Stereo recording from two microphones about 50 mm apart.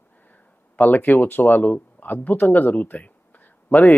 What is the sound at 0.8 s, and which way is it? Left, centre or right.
A man's voice, left.